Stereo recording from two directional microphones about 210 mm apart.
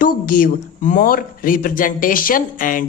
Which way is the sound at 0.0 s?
40° left (ahead or behind).